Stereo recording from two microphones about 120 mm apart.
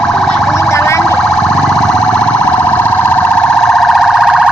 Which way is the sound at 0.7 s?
25° left (ahead or behind).